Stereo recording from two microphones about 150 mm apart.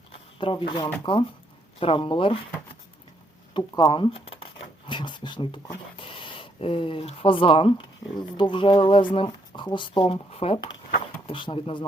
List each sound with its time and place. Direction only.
0.3 s speech: 35° left (ahead or behind)
3.5 s speech: 30° left (ahead or behind)